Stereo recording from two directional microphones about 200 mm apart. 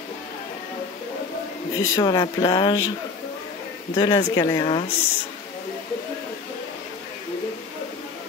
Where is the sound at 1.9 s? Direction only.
20° left (ahead or behind).